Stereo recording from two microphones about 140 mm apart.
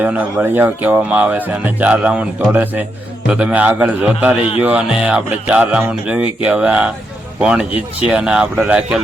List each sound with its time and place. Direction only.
0.0 s speech: 10° right (ahead or behind)